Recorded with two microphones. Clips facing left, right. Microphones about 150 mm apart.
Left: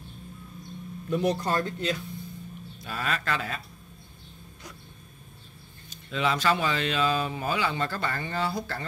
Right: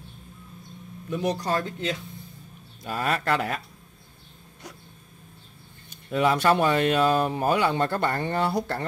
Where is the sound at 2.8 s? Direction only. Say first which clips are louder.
Right 5 dB; 40° right (ahead or behind).